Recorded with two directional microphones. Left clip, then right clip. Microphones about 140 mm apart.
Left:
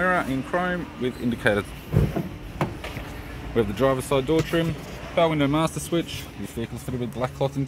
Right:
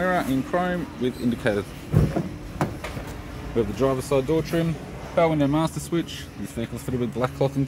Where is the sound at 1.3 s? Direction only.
10° left (ahead or behind).